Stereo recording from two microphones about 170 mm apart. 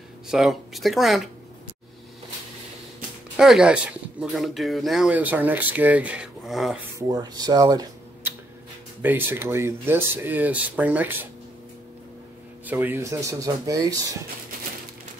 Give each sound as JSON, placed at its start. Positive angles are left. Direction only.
{"t": 0.3, "sound": "speech", "side_deg": 0}
{"t": 3.3, "sound": "speech", "side_deg": -5}
{"t": 7.0, "sound": "speech", "side_deg": -20}
{"t": 12.7, "sound": "speech", "side_deg": -15}